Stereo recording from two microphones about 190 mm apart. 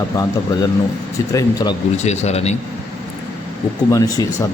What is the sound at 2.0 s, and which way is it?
Speech, 35° left (ahead or behind).